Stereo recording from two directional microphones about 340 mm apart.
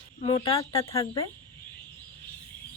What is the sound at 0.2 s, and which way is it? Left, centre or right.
Speech, centre.